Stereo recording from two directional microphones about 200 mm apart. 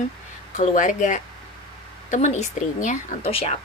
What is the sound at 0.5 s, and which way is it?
A woman's voice, 40° left (ahead or behind).